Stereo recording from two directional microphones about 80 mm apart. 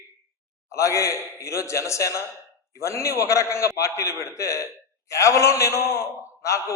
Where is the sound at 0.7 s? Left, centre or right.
Left.